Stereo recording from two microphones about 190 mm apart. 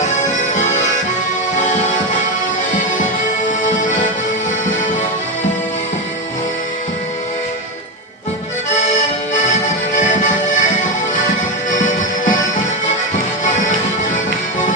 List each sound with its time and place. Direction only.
0.5 s music: 40° left (ahead or behind)
3.6 s accordion: 40° left (ahead or behind)
8.7 s accordion: 40° left (ahead or behind)